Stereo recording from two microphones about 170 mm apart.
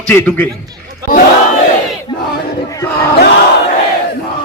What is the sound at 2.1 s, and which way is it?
Battle cry, 20° left (ahead or behind).